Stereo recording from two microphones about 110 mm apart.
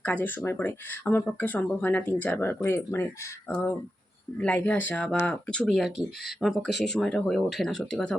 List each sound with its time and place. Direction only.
0.0 s speech: 15° left (ahead or behind)
4.4 s speech: 15° left (ahead or behind)